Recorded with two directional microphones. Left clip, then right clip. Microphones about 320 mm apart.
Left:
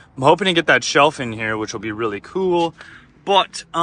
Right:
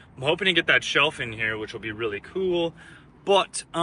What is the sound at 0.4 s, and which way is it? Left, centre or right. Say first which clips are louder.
Speech: left 5 dB; centre.